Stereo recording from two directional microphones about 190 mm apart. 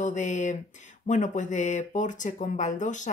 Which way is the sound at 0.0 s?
40° left (ahead or behind).